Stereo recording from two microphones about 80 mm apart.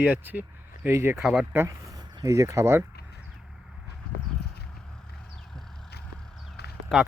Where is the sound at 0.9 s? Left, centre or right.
Right.